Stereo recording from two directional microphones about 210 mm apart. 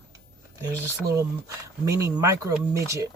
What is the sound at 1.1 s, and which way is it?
Speech, 15° right (ahead or behind).